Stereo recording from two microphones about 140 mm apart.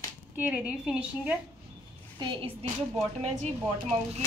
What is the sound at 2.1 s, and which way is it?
Speech, 35° right (ahead or behind).